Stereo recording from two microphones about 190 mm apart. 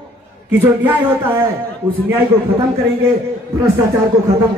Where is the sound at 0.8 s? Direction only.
10° right (ahead or behind).